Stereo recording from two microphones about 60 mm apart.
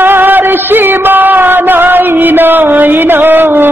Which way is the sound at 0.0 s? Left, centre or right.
Right.